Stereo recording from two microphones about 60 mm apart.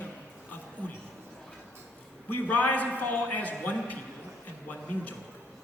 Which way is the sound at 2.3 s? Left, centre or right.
Left.